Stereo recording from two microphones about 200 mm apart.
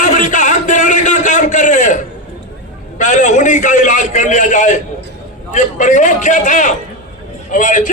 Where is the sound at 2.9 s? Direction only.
40° left (ahead or behind).